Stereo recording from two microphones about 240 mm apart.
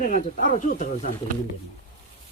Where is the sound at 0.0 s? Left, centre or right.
Left.